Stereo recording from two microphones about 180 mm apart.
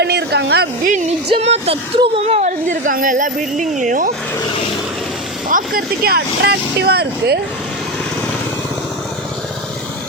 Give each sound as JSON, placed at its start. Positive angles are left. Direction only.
{"t": 0.0, "sound": "a sound", "side_deg": -65}
{"t": 1.3, "sound": "speech", "side_deg": -35}
{"t": 5.5, "sound": "speech", "side_deg": -50}